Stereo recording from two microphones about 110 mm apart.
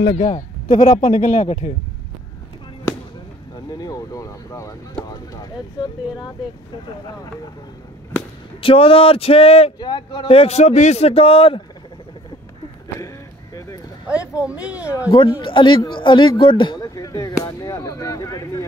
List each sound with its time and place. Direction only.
0.1 s a man's voice: 90° left
3.5 s speech: 35° left (ahead or behind)
8.5 s speech: 55° left (ahead or behind)
9.8 s speech: 40° left (ahead or behind)
10.2 s speech: 65° left (ahead or behind)
14.0 s speech: 10° right (ahead or behind)
15.4 s speech: 50° left (ahead or behind)
16.8 s speech: 30° left (ahead or behind)